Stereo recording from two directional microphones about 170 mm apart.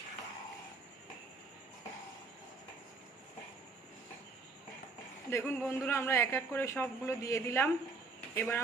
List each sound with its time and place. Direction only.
5.3 s speech: 15° left (ahead or behind)